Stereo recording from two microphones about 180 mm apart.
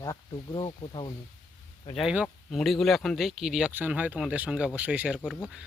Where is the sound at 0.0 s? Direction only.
20° left (ahead or behind).